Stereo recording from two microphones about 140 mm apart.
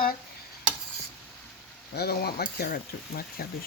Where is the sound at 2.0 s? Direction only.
90° left.